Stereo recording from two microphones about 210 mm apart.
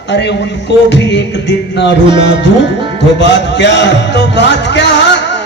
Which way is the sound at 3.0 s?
55° left (ahead or behind).